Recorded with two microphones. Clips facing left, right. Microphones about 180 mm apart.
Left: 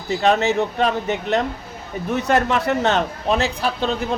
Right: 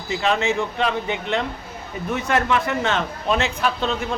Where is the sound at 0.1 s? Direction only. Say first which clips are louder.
Left 4 dB; 40° left (ahead or behind).